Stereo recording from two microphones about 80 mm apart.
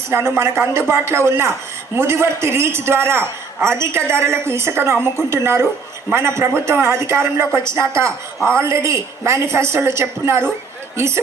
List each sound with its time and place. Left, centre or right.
0.1 s a man's voice: right